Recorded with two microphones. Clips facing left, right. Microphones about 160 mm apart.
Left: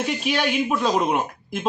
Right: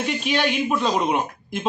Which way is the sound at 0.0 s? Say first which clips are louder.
Even; 5° left (ahead or behind).